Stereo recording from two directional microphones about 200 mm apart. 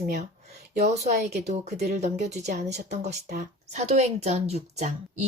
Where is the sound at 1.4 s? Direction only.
40° right (ahead or behind).